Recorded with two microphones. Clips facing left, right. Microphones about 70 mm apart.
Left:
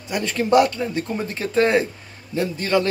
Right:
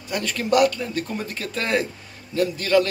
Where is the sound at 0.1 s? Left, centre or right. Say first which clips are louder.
Left 3 dB; left.